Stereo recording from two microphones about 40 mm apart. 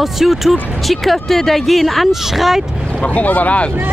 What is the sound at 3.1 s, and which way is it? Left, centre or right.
Speech, left.